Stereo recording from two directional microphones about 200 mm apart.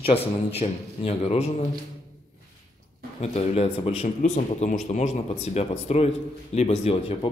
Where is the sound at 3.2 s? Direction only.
30° left (ahead or behind).